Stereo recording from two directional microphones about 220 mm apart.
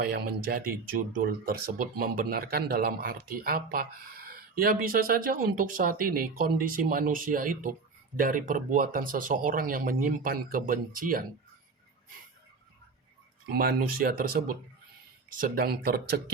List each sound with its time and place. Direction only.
0.0 s speech: 45° right (ahead or behind)
13.5 s speech: 45° right (ahead or behind)